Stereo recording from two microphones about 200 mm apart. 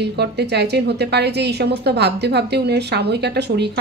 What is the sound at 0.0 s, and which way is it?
A woman's voice, 55° right (ahead or behind).